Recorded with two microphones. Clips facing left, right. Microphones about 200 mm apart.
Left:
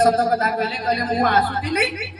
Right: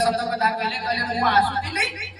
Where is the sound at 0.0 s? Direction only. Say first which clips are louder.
Left 5 dB; 50° left (ahead or behind).